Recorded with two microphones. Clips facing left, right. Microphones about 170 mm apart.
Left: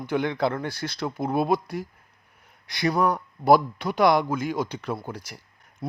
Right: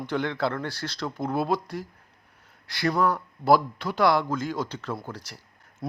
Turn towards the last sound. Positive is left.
turn(degrees=0)  # may be behind; listen again after turning